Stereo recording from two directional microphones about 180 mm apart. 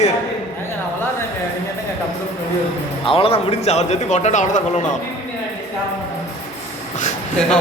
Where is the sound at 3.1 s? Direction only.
30° left (ahead or behind).